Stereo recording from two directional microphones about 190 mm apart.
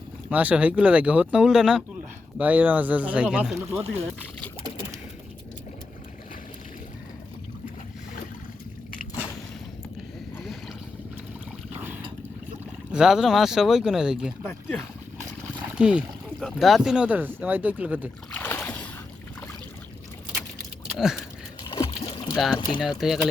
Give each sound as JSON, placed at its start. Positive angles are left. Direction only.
{"t": 0.3, "sound": "speech", "side_deg": -10}
{"t": 11.7, "sound": "boat", "side_deg": -10}
{"t": 12.9, "sound": "speech", "side_deg": -5}
{"t": 18.3, "sound": "boat", "side_deg": 10}
{"t": 21.0, "sound": "speech", "side_deg": 0}
{"t": 21.6, "sound": "a sound", "side_deg": 25}
{"t": 22.8, "sound": "speech", "side_deg": 0}